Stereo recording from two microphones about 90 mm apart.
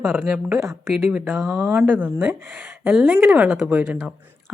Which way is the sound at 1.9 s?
20° right (ahead or behind).